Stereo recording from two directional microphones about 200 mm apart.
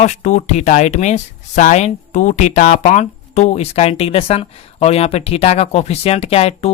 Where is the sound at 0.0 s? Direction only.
35° left (ahead or behind).